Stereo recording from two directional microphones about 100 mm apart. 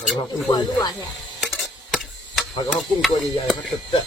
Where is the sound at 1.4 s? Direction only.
Centre (ahead or behind).